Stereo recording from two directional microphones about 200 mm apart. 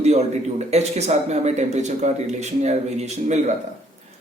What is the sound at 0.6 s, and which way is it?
Speech, 35° right (ahead or behind).